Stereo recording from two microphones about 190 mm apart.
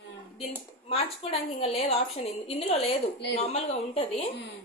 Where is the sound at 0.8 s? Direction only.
30° left (ahead or behind).